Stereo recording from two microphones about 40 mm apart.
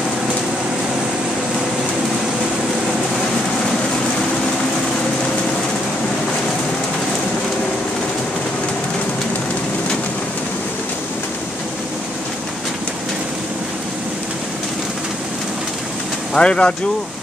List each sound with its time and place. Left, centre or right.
16.3 s speech: left